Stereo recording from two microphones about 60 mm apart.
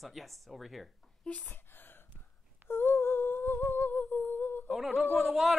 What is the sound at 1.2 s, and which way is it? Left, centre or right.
Speech, left.